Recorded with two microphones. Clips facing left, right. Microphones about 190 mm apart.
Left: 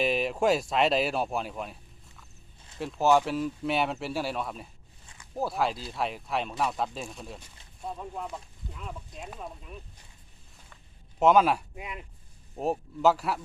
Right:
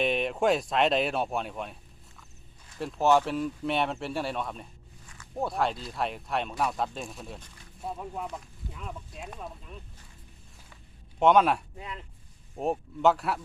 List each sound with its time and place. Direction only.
0.0 s speech: centre (ahead or behind)
5.0 s a sound: 20° left (ahead or behind)
5.3 s speech: centre (ahead or behind)
11.2 s speech: centre (ahead or behind)
11.8 s speech: 15° left (ahead or behind)
12.5 s speech: centre (ahead or behind)